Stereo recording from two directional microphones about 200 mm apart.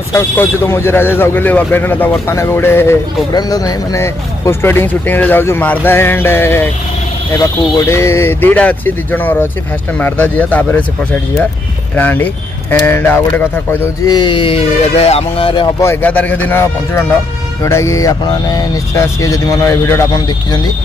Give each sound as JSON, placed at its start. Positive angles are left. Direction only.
{"t": 0.1, "sound": "speech", "side_deg": 15}
{"t": 15.8, "sound": "speech", "side_deg": 10}